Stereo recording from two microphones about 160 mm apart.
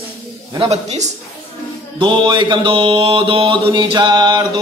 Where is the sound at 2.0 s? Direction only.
30° right (ahead or behind).